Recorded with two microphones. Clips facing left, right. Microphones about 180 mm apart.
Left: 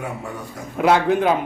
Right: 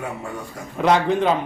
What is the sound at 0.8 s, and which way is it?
Speech, 5° left (ahead or behind).